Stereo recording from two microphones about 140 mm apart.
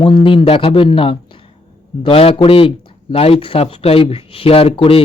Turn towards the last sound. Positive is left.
turn(degrees=40)  # may be behind; listen again after turning